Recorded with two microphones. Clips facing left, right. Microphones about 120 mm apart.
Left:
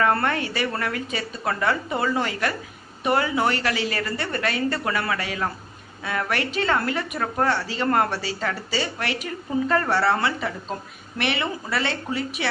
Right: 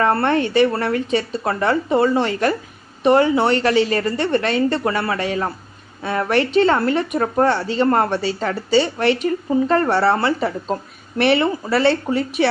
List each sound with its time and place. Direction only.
0.0 s a woman's voice: 30° right (ahead or behind)